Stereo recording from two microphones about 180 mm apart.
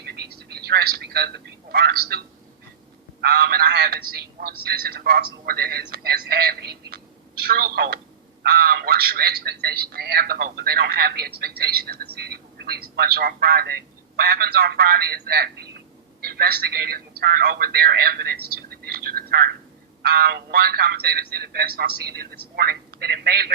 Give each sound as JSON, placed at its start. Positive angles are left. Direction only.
{"t": 0.0, "sound": "telephone", "side_deg": -60}
{"t": 1.7, "sound": "a man's voice", "side_deg": -65}